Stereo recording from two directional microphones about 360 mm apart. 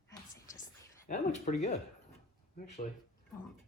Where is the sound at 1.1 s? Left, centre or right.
Centre.